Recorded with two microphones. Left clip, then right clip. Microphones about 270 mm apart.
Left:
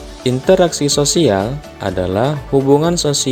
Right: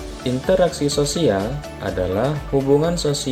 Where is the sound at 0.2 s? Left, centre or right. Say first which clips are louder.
Left 5 dB; left.